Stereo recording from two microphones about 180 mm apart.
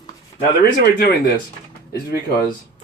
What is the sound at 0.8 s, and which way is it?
Speech, 60° left (ahead or behind).